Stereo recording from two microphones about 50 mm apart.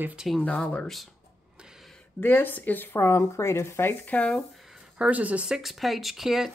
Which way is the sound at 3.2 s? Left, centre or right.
Left.